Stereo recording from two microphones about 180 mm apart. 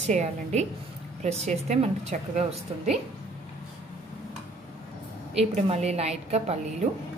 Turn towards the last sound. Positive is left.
turn(degrees=-35)  # may be behind; listen again after turning